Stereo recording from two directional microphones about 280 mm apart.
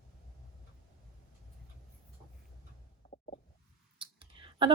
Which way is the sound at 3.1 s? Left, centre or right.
Left.